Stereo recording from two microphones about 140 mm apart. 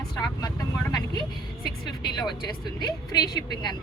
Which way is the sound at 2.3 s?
30° left (ahead or behind).